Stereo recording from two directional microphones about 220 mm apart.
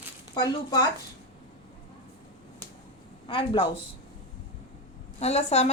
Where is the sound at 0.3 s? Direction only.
15° left (ahead or behind).